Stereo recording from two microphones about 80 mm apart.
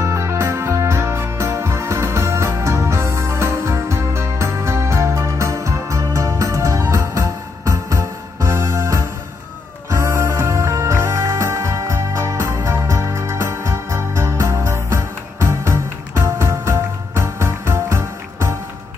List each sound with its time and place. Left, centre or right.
0.0 s music: right